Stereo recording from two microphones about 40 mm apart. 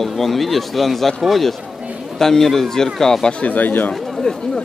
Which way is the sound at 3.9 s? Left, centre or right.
Centre.